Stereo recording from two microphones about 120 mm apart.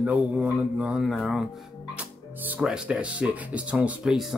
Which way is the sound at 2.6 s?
5° right (ahead or behind).